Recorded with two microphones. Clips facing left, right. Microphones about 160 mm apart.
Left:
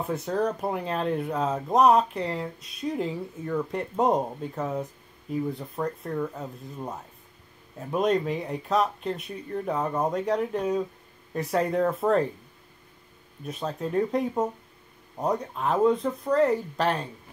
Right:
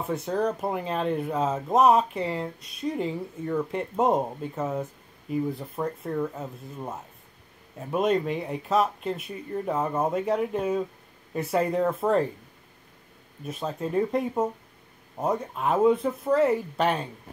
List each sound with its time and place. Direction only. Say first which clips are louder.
0.0 s speech: even; centre (ahead or behind)
13.5 s speech: even; centre (ahead or behind)